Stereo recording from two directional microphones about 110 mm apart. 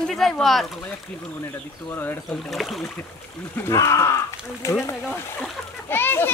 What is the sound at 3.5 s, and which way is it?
A child's voice, 25° left (ahead or behind).